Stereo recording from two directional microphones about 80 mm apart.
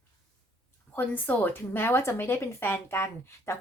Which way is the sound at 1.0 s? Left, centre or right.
Left.